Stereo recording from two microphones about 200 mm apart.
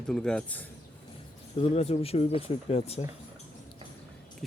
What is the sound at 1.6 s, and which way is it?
Speech, 30° left (ahead or behind).